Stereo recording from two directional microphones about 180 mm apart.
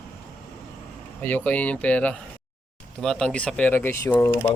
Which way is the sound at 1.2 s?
10° left (ahead or behind).